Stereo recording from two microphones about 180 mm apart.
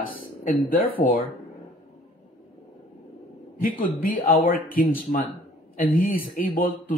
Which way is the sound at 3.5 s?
50° left (ahead or behind).